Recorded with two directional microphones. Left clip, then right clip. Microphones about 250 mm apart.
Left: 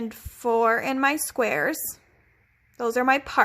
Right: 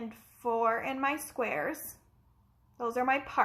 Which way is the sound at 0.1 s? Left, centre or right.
Left.